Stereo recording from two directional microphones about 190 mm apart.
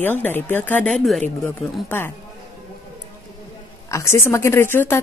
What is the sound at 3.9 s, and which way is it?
A woman's voice, 15° left (ahead or behind).